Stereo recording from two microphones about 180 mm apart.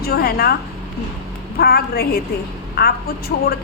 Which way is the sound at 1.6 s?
60° left (ahead or behind).